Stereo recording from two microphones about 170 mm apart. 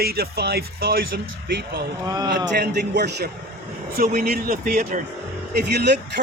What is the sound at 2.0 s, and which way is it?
Speech, 20° right (ahead or behind).